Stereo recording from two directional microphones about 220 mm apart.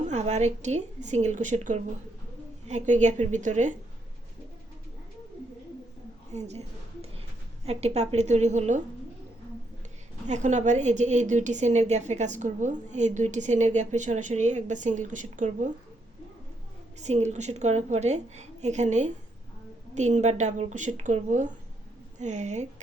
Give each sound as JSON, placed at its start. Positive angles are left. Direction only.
{"t": 0.1, "sound": "a woman's voice", "side_deg": -30}
{"t": 6.3, "sound": "a sound", "side_deg": -30}
{"t": 7.6, "sound": "a woman's voice", "side_deg": -30}
{"t": 10.2, "sound": "a woman's voice", "side_deg": -35}
{"t": 17.0, "sound": "a woman's voice", "side_deg": -30}